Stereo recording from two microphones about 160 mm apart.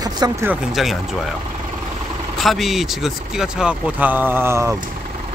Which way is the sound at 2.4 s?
Centre (ahead or behind).